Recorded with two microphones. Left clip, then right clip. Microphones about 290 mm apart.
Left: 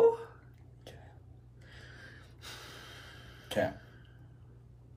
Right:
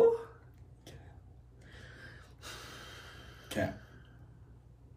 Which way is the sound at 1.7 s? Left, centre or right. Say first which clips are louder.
Even; centre.